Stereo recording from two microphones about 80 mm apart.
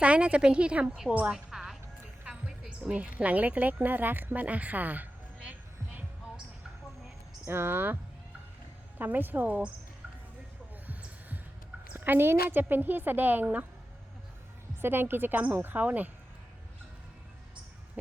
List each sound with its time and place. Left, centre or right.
0.0 s a woman's voice: centre
1.3 s music: centre
2.2 s a woman's voice: centre
7.4 s a woman's voice: right
9.0 s a woman's voice: right
11.9 s a woman's voice: right
14.8 s a woman's voice: right